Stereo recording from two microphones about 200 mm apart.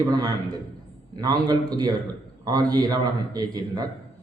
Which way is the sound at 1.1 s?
20° right (ahead or behind).